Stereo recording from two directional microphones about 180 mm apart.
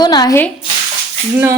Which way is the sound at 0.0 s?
20° left (ahead or behind).